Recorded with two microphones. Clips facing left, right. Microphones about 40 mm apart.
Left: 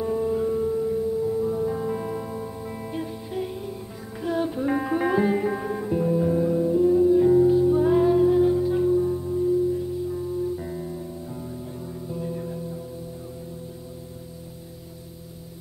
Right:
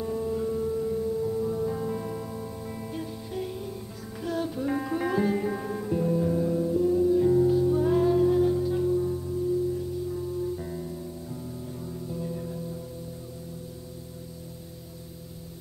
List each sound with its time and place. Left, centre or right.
0.0 s music: centre